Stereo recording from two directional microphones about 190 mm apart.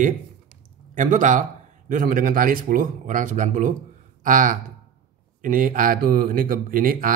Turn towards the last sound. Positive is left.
turn(degrees=-45)  # may be behind; listen again after turning